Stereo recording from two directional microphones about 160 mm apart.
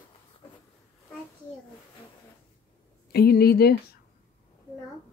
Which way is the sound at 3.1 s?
80° left.